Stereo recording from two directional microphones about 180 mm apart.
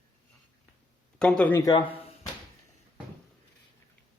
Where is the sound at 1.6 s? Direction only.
20° left (ahead or behind).